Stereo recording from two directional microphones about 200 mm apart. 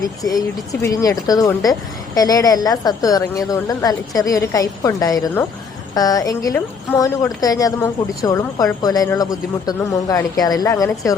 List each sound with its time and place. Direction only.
0.0 s a woman's voice: 20° left (ahead or behind)